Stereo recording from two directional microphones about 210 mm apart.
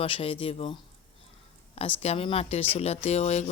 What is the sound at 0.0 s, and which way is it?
Speech, 25° left (ahead or behind).